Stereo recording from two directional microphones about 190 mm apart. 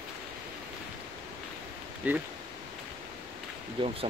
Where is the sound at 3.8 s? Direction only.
25° right (ahead or behind).